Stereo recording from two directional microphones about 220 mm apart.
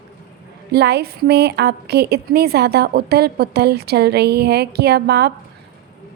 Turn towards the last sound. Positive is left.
turn(degrees=-45)  # may be behind; listen again after turning